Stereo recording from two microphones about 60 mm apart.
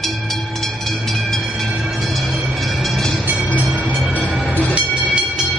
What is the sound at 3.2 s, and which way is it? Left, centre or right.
Train, right.